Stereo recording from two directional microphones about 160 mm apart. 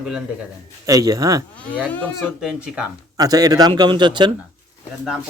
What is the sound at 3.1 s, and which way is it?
Speech, 25° right (ahead or behind).